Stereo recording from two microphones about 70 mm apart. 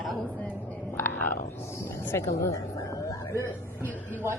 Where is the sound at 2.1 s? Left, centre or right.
Left.